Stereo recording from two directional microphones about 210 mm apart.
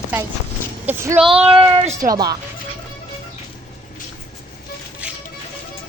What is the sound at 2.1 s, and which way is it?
Speech, 20° right (ahead or behind).